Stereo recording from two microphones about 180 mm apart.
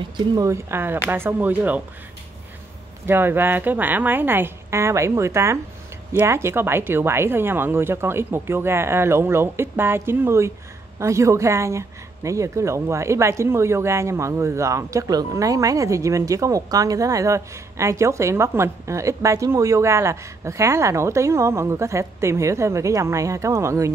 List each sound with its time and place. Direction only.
0.3 s speech: 20° right (ahead or behind)
3.1 s speech: 10° right (ahead or behind)